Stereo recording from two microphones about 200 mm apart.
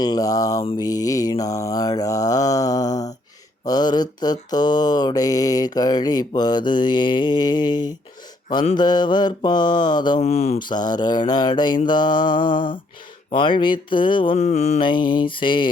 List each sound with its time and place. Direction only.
0.0 s mantra: 20° left (ahead or behind)